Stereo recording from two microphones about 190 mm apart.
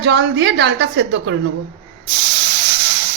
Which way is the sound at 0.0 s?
65° right (ahead or behind).